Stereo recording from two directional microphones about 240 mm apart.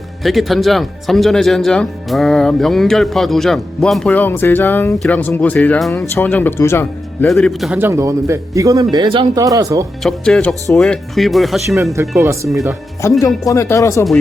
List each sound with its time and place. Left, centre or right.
0.2 s speech: centre
10.0 s speech: centre
11.9 s speech: centre
12.5 s speech: centre
13.0 s speech: centre